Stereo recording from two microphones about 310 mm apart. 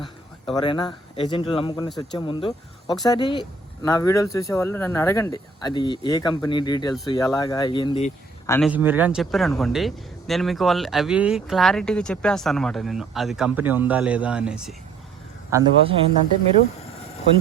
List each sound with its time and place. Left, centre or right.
0.5 s speech: centre
8.4 s speech: centre
8.7 s a man's voice: centre